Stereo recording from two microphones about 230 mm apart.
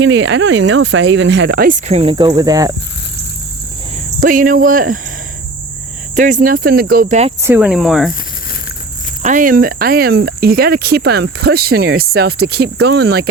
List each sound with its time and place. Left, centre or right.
0.0 s speech: right; by 2.7 s centre
4.2 s speech: right
6.1 s speech: right
7.4 s speech: centre
9.2 s speech: right